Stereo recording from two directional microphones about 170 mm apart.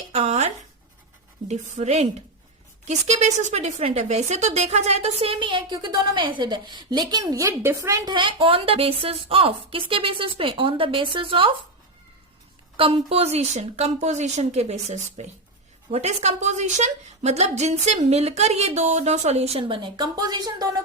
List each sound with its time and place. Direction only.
0.1 s a sound: 40° right (ahead or behind)
1.5 s speech: 40° right (ahead or behind)
12.7 s speech: 35° right (ahead or behind)